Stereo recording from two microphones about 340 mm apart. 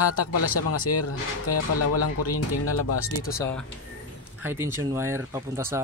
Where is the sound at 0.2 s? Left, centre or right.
Left.